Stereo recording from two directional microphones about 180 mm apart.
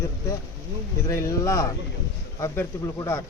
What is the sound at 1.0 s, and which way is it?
Speech, 15° left (ahead or behind).